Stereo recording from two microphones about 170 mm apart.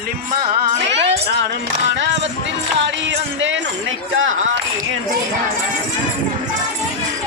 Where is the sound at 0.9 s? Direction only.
90° right.